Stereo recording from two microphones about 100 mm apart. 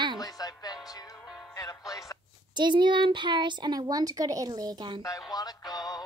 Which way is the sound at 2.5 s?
50° right (ahead or behind).